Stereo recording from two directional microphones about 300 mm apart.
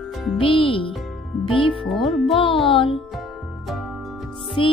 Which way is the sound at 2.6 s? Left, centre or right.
Centre.